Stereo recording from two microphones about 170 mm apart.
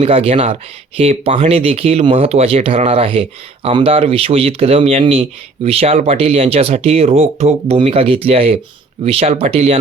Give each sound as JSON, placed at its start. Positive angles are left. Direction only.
{"t": 0.0, "sound": "speech", "side_deg": -35}